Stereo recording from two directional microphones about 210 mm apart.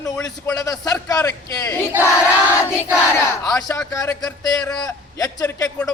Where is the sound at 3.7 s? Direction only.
15° left (ahead or behind).